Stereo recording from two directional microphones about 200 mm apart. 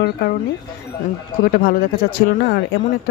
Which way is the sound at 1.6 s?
50° left (ahead or behind).